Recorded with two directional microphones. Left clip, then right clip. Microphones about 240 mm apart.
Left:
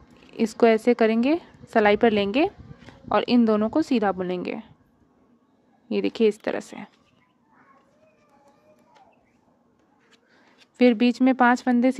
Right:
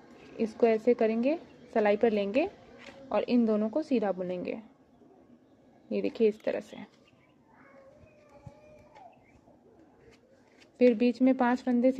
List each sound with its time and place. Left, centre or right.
0.4 s a woman's voice: left
5.9 s a woman's voice: left
10.6 s a woman's voice: left